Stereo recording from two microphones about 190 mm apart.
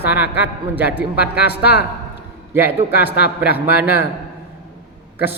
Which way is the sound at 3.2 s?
60° left (ahead or behind).